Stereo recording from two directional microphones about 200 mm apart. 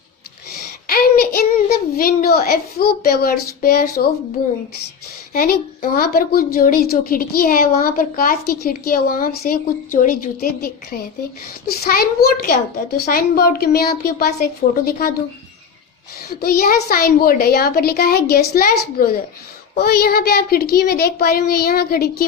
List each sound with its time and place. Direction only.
0.9 s child singing: 50° left (ahead or behind)
2.0 s speech: 50° left (ahead or behind)
5.3 s speech: 45° left (ahead or behind)
16.3 s speech: 50° left (ahead or behind)